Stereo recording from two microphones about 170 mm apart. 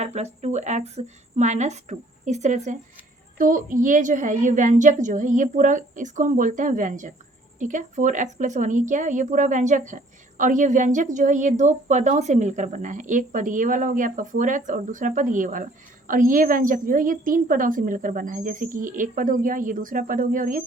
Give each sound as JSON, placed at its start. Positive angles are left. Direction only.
{"t": 0.0, "sound": "speech", "side_deg": -40}
{"t": 3.3, "sound": "speech", "side_deg": -55}